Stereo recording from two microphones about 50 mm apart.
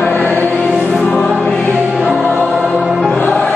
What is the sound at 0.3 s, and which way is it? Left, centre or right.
Music, left.